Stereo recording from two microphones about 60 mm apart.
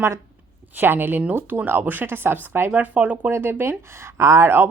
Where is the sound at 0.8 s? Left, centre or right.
Right.